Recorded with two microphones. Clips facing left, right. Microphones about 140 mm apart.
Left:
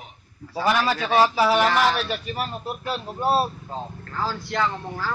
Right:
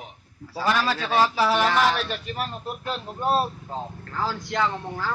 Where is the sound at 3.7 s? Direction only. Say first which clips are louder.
Even; 15° right (ahead or behind).